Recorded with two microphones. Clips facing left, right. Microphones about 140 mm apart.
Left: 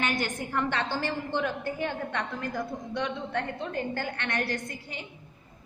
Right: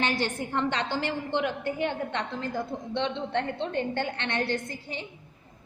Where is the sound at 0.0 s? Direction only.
30° right (ahead or behind).